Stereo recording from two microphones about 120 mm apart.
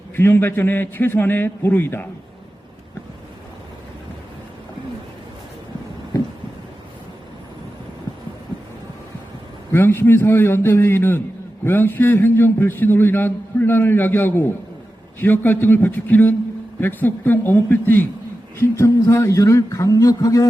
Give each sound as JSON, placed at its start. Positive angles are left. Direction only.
{"t": 0.2, "sound": "a man's voice", "side_deg": 15}
{"t": 9.7, "sound": "a man's voice", "side_deg": 20}